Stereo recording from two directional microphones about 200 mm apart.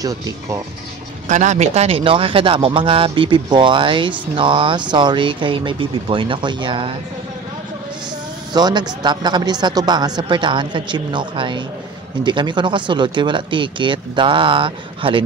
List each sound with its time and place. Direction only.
1.3 s speech: 35° right (ahead or behind)
8.5 s speech: 20° right (ahead or behind)